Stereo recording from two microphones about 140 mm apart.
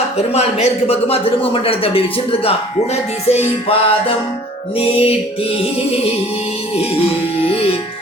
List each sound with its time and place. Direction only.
0.3 s a man's voice: 50° left (ahead or behind)
7.4 s a man's voice: 45° left (ahead or behind)